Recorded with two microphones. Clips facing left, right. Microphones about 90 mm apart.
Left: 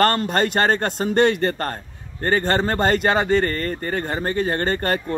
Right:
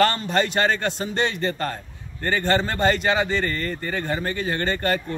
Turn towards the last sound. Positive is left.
turn(degrees=40)  # may be behind; listen again after turning